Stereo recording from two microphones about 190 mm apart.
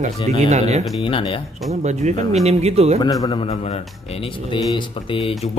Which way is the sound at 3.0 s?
20° left (ahead or behind).